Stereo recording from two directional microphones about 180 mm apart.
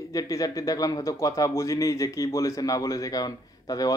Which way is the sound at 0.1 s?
20° left (ahead or behind).